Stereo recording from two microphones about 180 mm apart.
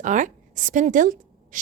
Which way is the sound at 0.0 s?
45° right (ahead or behind).